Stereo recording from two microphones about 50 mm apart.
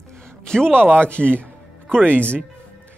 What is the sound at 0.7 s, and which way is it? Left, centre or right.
Speech, right.